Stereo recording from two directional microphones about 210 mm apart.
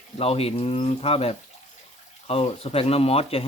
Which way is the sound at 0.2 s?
30° left (ahead or behind).